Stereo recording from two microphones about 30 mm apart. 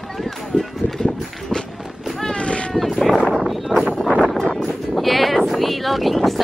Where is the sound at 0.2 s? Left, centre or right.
Centre.